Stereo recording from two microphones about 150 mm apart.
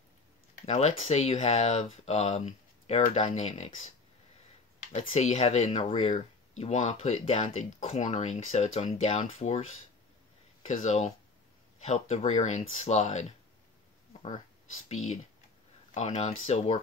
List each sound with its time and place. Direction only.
0.7 s speech: 45° left (ahead or behind)
4.9 s speech: 50° left (ahead or behind)
10.7 s speech: 50° left (ahead or behind)
15.9 s speech: 50° left (ahead or behind)